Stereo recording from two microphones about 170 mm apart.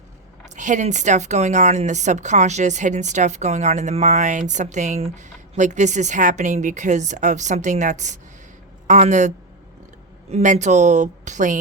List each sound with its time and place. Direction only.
0.5 s a woman's voice: 45° right (ahead or behind)